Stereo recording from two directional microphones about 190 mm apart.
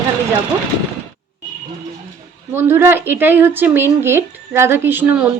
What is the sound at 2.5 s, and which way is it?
Speech, 10° right (ahead or behind).